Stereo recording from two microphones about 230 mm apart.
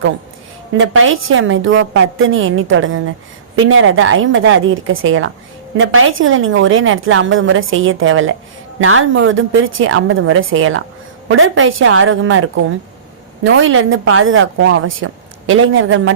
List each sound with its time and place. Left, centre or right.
0.8 s a woman's voice: right